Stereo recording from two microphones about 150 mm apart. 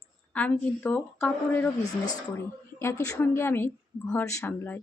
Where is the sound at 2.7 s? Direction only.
20° left (ahead or behind).